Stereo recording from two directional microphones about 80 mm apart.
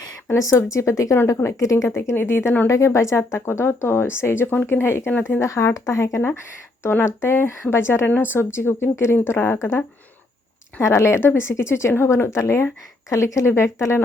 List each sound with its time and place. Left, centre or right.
0.3 s speech: left
2.6 s speech: left
6.8 s speech: left